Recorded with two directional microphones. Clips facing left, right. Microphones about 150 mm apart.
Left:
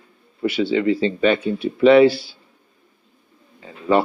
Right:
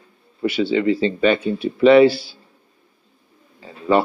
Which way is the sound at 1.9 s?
35° right (ahead or behind).